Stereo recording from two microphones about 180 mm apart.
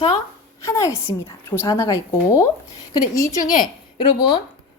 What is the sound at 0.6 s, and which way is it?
A woman's voice, 15° left (ahead or behind).